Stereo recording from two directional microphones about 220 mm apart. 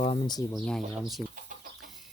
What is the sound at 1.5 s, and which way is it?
Chicken, 35° right (ahead or behind).